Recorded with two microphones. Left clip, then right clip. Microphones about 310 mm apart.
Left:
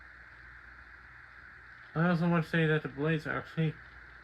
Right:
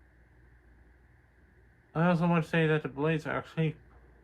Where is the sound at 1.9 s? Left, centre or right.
Right.